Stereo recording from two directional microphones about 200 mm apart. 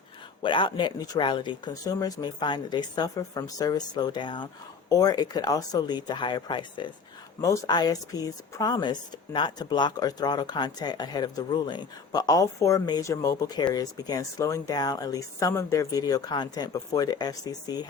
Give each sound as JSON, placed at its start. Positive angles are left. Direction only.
{"t": 0.4, "sound": "speech", "side_deg": 25}